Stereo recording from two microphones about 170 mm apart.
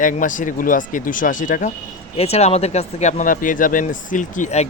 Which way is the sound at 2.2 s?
35° left (ahead or behind).